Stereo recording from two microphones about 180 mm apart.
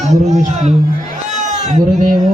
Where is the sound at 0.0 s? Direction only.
40° right (ahead or behind).